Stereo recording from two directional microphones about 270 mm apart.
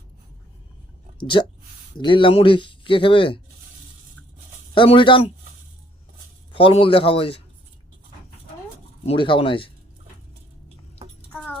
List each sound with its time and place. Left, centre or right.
1.2 s a man's voice: centre
4.7 s a man's voice: centre
6.5 s a man's voice: centre
9.0 s a man's voice: centre
11.3 s a sound: centre